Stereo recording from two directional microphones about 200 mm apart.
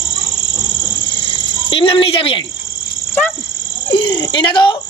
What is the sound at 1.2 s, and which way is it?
Cricket, 25° left (ahead or behind).